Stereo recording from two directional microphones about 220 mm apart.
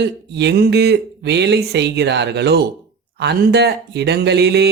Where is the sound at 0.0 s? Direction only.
50° right (ahead or behind).